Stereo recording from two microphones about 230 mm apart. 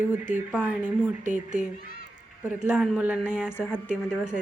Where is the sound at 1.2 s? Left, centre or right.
Right.